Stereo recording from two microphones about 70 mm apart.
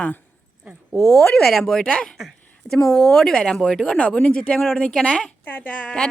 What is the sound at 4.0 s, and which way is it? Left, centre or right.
A woman's voice, centre.